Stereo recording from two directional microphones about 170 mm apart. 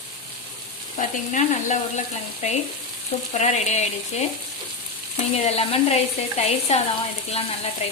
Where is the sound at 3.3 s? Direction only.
40° left (ahead or behind).